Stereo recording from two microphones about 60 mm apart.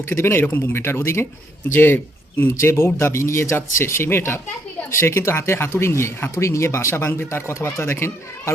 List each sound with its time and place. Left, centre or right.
0.1 s speech: left
2.5 s speech: left